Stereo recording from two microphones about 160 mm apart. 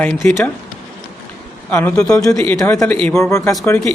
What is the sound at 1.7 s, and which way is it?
Speech, 10° left (ahead or behind).